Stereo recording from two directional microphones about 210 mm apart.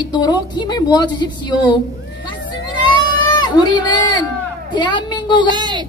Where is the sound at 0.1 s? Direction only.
20° left (ahead or behind).